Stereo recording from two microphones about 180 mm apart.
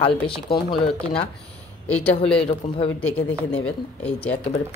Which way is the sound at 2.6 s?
40° left (ahead or behind).